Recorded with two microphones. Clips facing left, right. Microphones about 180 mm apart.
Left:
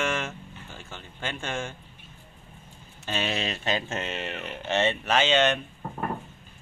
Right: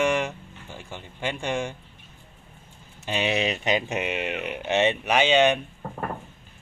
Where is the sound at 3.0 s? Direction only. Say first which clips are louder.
Right 4 dB; 15° right (ahead or behind).